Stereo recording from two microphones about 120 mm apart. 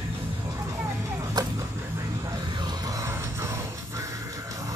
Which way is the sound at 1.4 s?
35° right (ahead or behind).